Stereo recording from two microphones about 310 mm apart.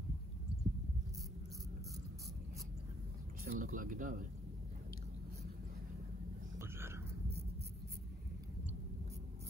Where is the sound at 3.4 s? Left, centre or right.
Right.